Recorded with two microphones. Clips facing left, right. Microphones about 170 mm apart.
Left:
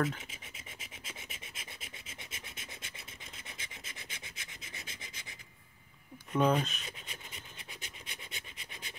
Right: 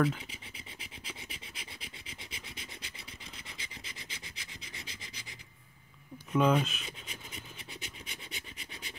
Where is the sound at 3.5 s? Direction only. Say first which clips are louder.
Right 1 dB; 50° left (ahead or behind).